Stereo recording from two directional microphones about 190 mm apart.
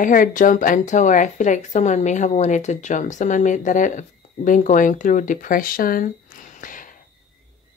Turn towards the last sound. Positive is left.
turn(degrees=45)  # may be behind; listen again after turning